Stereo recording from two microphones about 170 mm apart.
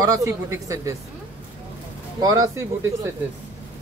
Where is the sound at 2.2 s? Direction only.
20° right (ahead or behind).